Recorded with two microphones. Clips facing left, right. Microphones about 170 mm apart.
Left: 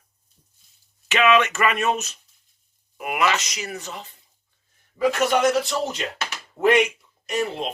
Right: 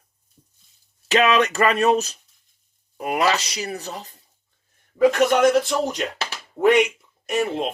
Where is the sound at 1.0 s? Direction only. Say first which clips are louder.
Right 1 dB; 35° right (ahead or behind).